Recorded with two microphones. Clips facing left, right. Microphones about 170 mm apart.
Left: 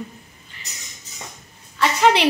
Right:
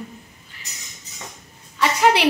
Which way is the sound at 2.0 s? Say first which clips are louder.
Left 1 dB; 10° right (ahead or behind).